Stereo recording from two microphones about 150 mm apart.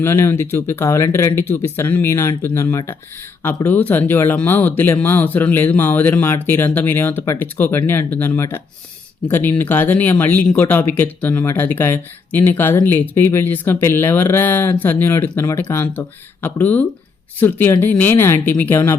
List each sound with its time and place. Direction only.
0.0 s speech: 15° left (ahead or behind)